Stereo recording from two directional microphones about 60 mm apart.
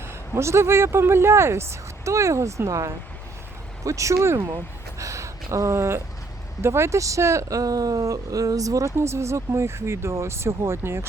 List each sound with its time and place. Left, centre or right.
0.3 s speech: right
4.5 s a sound: right
6.6 s speech: right
7.6 s speech: right
9.0 s speech: right